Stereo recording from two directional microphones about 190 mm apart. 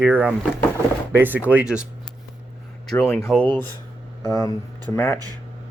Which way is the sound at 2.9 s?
Centre (ahead or behind).